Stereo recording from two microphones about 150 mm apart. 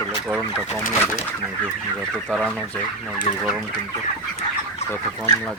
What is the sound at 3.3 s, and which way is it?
Chicken, 45° left (ahead or behind).